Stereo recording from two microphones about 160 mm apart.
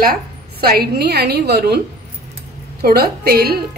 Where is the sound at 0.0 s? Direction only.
70° right (ahead or behind); by 1.8 s 90° right.